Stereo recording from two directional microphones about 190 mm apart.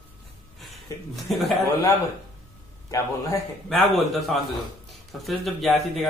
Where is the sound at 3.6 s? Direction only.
Centre (ahead or behind).